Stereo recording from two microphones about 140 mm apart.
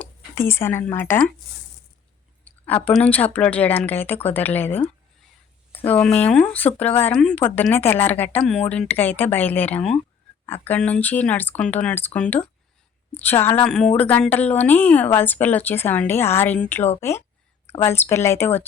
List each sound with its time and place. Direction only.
0.0 s speech: 15° left (ahead or behind)
2.4 s speech: 10° left (ahead or behind)
13.7 s speech: 5° left (ahead or behind)